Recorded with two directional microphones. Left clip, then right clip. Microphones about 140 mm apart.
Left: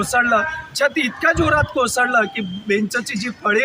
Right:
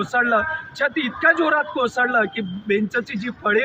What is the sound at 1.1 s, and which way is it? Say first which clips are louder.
A man's voice: even; 25° left (ahead or behind).